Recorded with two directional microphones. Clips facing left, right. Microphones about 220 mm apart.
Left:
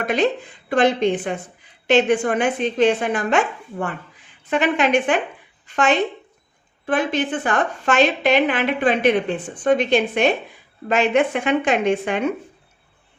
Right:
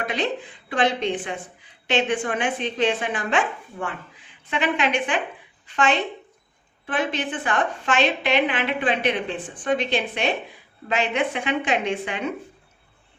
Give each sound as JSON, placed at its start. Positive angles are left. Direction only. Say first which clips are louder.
{"t": 0.0, "sound": "a woman's voice", "louder": "left 6 dB", "side_deg": 45}